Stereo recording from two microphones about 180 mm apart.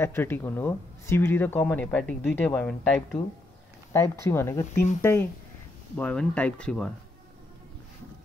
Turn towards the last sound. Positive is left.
turn(degrees=5)  # may be behind; listen again after turning